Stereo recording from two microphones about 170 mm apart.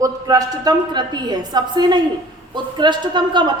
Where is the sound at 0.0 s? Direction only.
20° right (ahead or behind).